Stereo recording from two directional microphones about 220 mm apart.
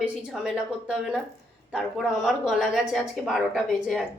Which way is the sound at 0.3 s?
Centre (ahead or behind).